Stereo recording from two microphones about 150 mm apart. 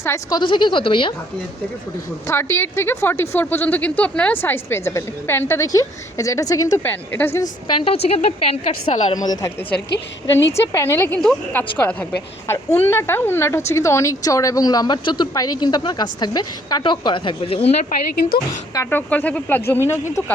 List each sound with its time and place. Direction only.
0.0 s a woman's voice: 20° left (ahead or behind)
0.3 s speech: 30° left (ahead or behind)
2.2 s a woman's voice: 15° left (ahead or behind)
7.9 s a woman's voice: 40° left (ahead or behind)
9.1 s a woman's voice: 25° left (ahead or behind); by 17.7 s 40° left (ahead or behind)
18.7 s a woman's voice: 15° left (ahead or behind)